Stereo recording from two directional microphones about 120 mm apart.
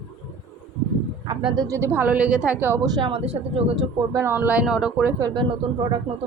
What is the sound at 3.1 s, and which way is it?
Speech, 55° right (ahead or behind).